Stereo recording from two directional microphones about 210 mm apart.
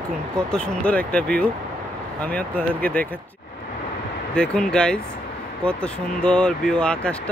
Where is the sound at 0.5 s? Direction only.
5° left (ahead or behind).